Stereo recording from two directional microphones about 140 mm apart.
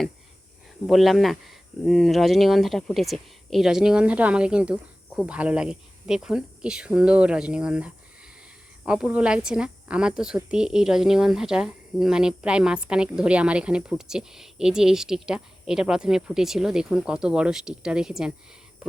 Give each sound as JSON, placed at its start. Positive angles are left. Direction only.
{"t": 0.9, "sound": "speech", "side_deg": 0}